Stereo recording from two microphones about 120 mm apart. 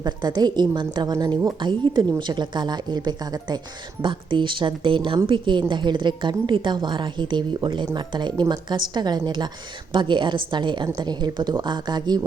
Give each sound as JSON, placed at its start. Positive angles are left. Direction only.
{"t": 0.0, "sound": "a woman's voice", "side_deg": -35}